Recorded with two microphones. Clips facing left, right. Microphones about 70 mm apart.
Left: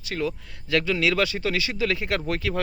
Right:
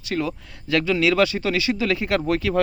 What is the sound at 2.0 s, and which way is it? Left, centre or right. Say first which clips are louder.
Speech: right 5 dB; right.